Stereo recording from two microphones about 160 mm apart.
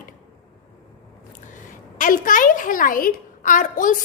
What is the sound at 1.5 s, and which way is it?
A woman's voice, 55° left (ahead or behind).